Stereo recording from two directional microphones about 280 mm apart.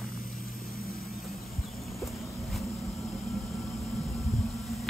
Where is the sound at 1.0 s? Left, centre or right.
Centre.